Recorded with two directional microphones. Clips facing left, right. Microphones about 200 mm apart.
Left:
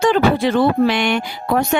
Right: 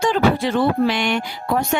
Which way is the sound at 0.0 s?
65° left (ahead or behind).